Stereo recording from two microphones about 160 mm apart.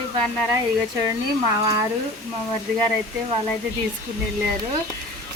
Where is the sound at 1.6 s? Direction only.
20° right (ahead or behind).